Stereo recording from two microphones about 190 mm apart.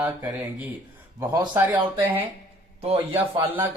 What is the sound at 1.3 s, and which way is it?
Speech, 20° right (ahead or behind).